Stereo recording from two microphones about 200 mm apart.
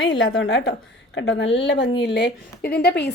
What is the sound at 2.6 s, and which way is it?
Speech, 55° left (ahead or behind).